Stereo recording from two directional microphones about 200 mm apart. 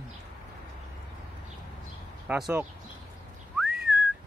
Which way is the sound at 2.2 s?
5° right (ahead or behind).